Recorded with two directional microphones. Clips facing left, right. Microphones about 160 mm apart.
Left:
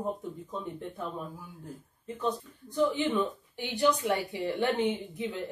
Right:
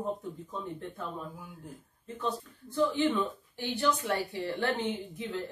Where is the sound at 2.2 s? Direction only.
15° left (ahead or behind).